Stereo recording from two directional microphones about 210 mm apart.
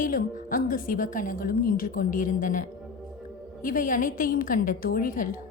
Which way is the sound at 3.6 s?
40° left (ahead or behind).